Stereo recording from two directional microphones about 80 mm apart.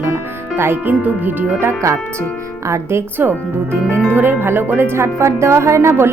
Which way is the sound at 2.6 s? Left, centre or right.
Right.